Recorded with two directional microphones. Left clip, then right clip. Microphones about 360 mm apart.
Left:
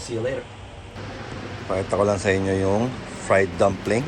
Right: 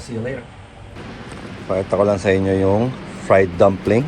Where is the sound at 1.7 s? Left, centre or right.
Centre.